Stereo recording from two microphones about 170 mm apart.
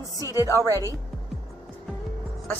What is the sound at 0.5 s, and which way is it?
Speech, 15° right (ahead or behind).